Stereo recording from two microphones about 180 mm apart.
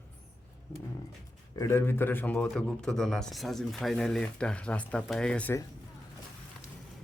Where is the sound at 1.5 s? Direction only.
15° left (ahead or behind).